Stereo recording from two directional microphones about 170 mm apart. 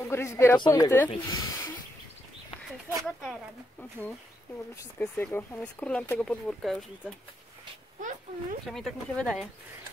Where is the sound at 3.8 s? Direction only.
10° left (ahead or behind).